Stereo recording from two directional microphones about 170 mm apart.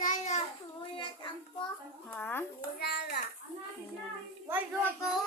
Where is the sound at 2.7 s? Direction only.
70° left (ahead or behind).